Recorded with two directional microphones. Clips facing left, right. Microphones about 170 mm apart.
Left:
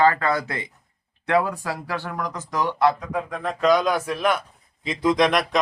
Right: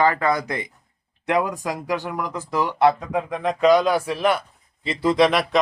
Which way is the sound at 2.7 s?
20° right (ahead or behind).